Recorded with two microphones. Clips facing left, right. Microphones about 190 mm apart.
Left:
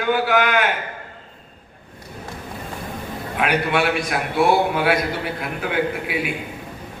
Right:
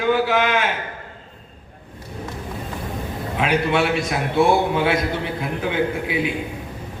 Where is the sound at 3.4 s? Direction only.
25° right (ahead or behind).